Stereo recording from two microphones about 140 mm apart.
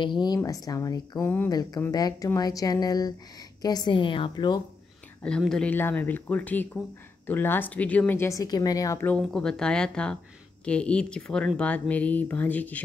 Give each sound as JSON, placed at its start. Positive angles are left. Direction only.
{"t": 0.0, "sound": "a woman's voice", "side_deg": 35}
{"t": 5.2, "sound": "speech", "side_deg": 5}
{"t": 9.0, "sound": "speech", "side_deg": 5}